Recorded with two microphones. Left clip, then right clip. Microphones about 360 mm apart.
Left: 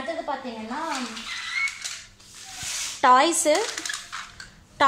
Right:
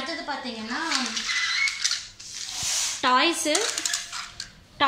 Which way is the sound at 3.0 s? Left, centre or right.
Centre.